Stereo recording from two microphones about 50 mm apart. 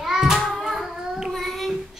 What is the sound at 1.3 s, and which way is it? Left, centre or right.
Child singing, centre.